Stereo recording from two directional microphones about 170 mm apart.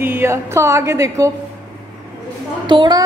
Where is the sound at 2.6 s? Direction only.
25° right (ahead or behind).